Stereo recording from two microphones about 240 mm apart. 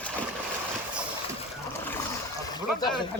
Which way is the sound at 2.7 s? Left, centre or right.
Centre.